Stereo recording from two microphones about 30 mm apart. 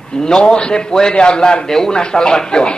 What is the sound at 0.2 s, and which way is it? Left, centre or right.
A woman's voice, left.